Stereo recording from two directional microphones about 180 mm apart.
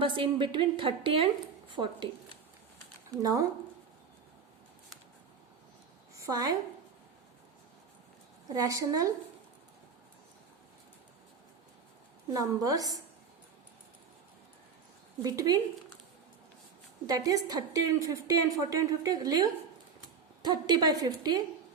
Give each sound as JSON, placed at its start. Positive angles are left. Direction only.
{"t": 0.0, "sound": "a woman's voice", "side_deg": -25}
{"t": 3.1, "sound": "a woman's voice", "side_deg": -20}
{"t": 6.1, "sound": "a woman's voice", "side_deg": -20}
{"t": 8.4, "sound": "a woman's voice", "side_deg": -20}
{"t": 12.3, "sound": "a woman's voice", "side_deg": -20}
{"t": 15.2, "sound": "a woman's voice", "side_deg": -20}
{"t": 17.1, "sound": "a woman's voice", "side_deg": -20}